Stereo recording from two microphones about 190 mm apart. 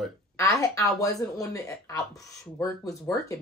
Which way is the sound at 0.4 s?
15° left (ahead or behind).